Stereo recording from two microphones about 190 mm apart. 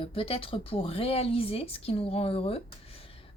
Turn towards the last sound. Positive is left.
turn(degrees=30)  # may be behind; listen again after turning